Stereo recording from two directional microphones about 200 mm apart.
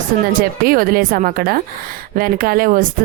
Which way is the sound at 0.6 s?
45° right (ahead or behind).